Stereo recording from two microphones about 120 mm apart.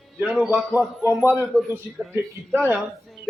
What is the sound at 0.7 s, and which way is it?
A man's voice, 15° right (ahead or behind).